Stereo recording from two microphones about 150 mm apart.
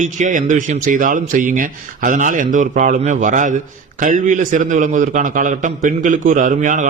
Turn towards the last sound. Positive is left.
turn(degrees=-55)  # may be behind; listen again after turning